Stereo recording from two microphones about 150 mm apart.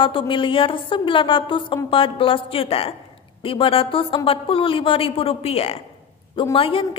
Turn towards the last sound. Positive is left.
turn(degrees=35)  # may be behind; listen again after turning